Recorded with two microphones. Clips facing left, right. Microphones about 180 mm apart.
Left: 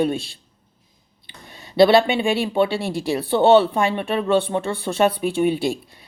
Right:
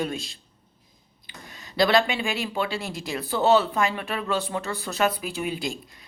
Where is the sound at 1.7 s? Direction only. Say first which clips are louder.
Left 7 dB; 30° left (ahead or behind).